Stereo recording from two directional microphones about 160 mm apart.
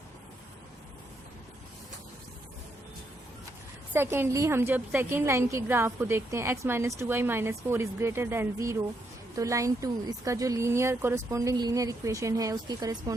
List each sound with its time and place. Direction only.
3.9 s a woman's voice: 15° right (ahead or behind)